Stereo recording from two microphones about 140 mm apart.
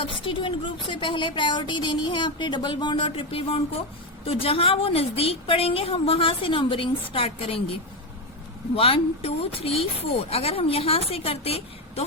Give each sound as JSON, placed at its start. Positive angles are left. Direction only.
{"t": 0.0, "sound": "a woman's voice", "side_deg": 40}
{"t": 8.7, "sound": "speech", "side_deg": 45}